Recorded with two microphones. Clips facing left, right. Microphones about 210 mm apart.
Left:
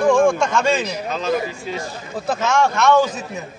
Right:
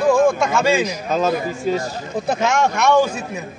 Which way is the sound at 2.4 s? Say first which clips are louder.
Left 1 dB; 15° right (ahead or behind).